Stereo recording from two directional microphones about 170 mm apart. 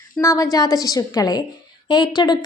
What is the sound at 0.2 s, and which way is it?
A woman's voice, 20° left (ahead or behind).